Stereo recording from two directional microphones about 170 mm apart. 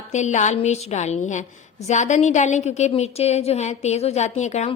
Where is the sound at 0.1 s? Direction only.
45° left (ahead or behind).